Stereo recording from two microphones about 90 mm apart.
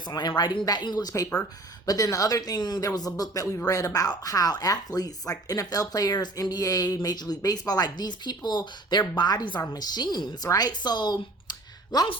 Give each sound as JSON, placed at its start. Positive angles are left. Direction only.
{"t": 0.1, "sound": "speech", "side_deg": 50}